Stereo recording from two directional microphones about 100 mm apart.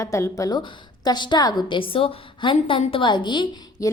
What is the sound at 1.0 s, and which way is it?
Speech, 45° left (ahead or behind).